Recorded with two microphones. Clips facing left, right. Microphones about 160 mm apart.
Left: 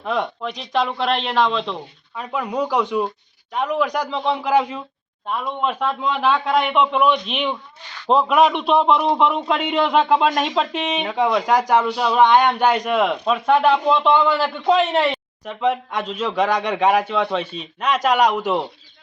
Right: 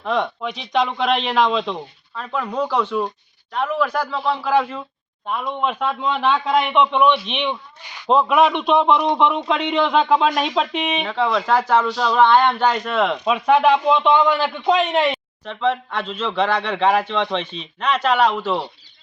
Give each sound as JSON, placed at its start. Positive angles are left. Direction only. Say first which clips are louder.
{"t": 0.0, "sound": "a man's voice", "louder": "right 1 dB", "side_deg": 5}
{"t": 2.1, "sound": "a man's voice", "louder": "even", "side_deg": 10}
{"t": 5.3, "sound": "a man's voice", "louder": "even", "side_deg": 0}
{"t": 7.9, "sound": "a man's voice", "louder": "even", "side_deg": -15}
{"t": 8.1, "sound": "a man's voice", "louder": "even", "side_deg": 0}
{"t": 11.0, "sound": "a man's voice", "louder": "left 3 dB", "side_deg": 15}
{"t": 13.2, "sound": "a man's voice", "louder": "right 3 dB", "side_deg": 0}